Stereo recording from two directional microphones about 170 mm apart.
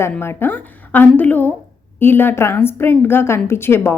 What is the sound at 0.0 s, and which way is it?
A woman's voice, 15° left (ahead or behind).